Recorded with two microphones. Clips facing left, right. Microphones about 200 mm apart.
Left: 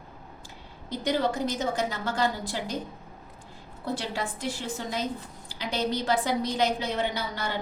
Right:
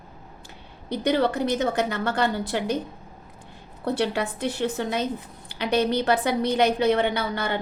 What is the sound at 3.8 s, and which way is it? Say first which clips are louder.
A woman's voice: right 7 dB; 60° right (ahead or behind).